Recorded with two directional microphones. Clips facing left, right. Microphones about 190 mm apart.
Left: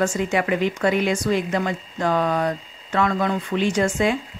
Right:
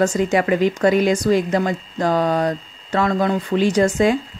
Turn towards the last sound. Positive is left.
turn(degrees=-40)  # may be behind; listen again after turning